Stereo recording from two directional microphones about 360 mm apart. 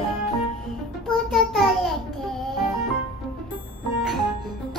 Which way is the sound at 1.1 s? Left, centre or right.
Centre.